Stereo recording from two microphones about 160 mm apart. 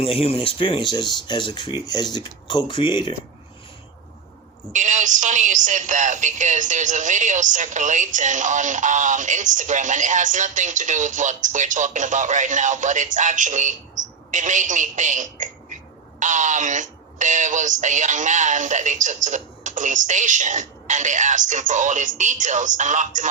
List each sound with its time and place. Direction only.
0.0 s speech: 35° left (ahead or behind)
4.7 s speech: 50° right (ahead or behind)